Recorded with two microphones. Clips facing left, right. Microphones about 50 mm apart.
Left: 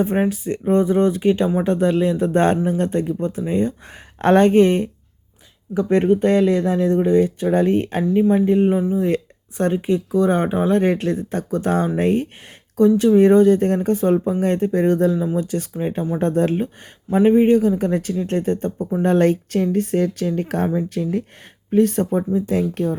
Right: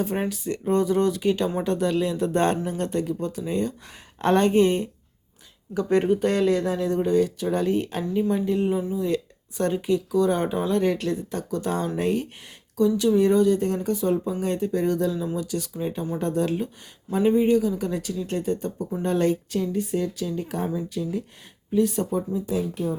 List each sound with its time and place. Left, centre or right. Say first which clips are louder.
0.0 s speech: left 7 dB; left
5.9 s speech: left 5 dB; centre
6.8 s speech: left 6 dB; left